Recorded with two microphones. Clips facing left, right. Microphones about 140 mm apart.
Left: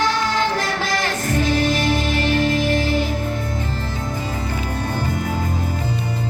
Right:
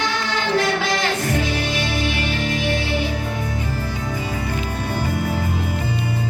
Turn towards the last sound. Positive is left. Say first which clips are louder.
# even
turn(degrees=-10)  # may be behind; listen again after turning